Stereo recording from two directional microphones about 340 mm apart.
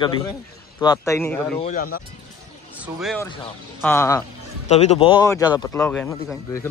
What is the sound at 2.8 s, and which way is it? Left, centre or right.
Speech, centre.